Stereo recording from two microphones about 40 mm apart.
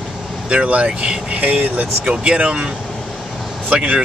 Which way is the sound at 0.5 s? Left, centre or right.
Right.